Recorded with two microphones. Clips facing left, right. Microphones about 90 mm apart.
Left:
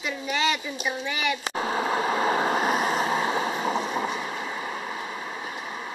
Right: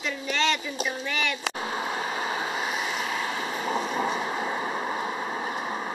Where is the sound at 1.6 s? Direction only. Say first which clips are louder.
Left 5 dB; 55° left (ahead or behind); by 3.4 s 35° left (ahead or behind).